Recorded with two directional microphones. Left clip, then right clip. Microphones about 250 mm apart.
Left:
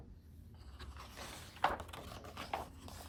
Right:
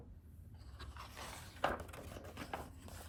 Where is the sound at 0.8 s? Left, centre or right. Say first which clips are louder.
Even; centre.